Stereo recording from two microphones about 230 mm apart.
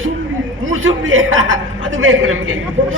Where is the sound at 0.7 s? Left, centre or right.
Right.